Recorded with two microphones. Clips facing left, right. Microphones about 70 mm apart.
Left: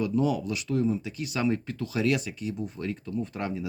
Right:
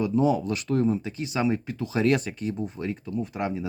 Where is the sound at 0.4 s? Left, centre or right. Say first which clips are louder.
Right 3 dB; right; by 2.0 s centre.